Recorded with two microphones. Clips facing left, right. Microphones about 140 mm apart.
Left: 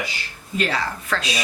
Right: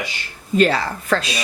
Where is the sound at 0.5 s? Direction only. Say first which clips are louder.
Right 7 dB; 40° right (ahead or behind).